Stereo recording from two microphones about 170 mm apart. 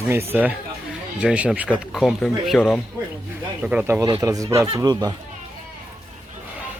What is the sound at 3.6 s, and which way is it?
Speech, 10° right (ahead or behind).